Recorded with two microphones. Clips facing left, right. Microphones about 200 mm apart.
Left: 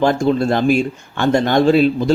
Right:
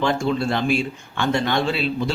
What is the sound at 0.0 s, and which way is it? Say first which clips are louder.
Speech: left 6 dB; 40° left (ahead or behind).